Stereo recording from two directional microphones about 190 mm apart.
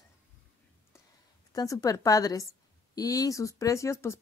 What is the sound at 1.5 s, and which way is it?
Speech, 20° left (ahead or behind).